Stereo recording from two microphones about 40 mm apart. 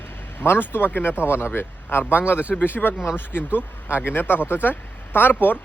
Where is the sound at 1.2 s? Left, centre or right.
Left.